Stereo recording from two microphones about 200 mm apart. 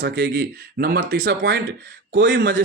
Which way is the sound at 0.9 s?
45° right (ahead or behind).